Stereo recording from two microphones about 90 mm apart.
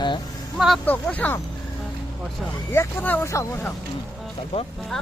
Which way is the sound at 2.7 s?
25° left (ahead or behind).